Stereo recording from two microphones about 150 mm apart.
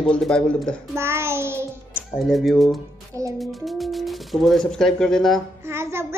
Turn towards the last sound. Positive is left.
turn(degrees=-15)  # may be behind; listen again after turning